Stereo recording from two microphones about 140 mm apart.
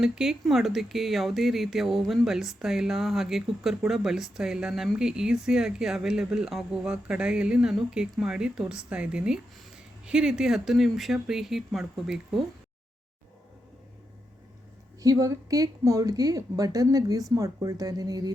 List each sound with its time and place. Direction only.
0.0 s speech: 5° right (ahead or behind)
15.0 s a woman's voice: 25° right (ahead or behind)